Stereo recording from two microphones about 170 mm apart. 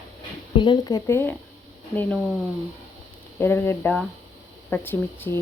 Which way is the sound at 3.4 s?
15° left (ahead or behind).